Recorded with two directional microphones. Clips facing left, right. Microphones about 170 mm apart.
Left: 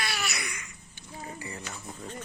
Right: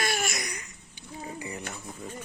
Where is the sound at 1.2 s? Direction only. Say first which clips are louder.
Right 3 dB; 15° right (ahead or behind).